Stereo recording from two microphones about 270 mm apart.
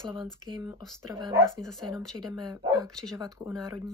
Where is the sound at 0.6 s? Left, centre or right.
Centre.